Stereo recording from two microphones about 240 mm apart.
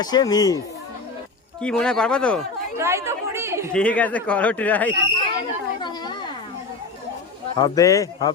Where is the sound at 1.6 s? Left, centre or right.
Centre.